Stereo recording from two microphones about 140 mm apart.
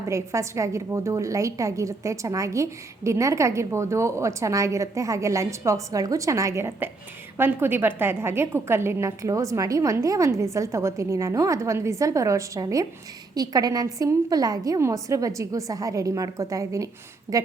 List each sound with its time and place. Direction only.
0.1 s a woman's voice: 20° right (ahead or behind)